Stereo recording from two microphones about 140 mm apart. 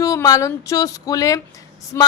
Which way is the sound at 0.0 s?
25° left (ahead or behind).